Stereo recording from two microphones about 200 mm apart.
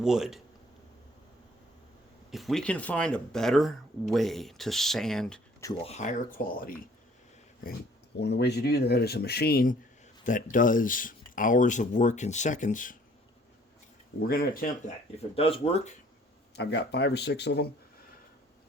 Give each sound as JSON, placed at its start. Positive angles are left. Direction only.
{"t": 0.0, "sound": "speech", "side_deg": -5}
{"t": 2.3, "sound": "speech", "side_deg": 0}
{"t": 5.8, "sound": "speech", "side_deg": 35}
{"t": 8.2, "sound": "speech", "side_deg": 55}
{"t": 14.2, "sound": "speech", "side_deg": 50}
{"t": 15.4, "sound": "speech", "side_deg": 30}
{"t": 16.6, "sound": "speech", "side_deg": 60}